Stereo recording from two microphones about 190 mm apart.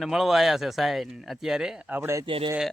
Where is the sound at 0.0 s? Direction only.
Centre (ahead or behind).